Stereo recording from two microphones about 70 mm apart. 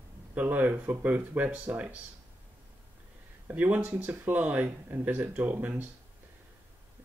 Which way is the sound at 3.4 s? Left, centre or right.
Right.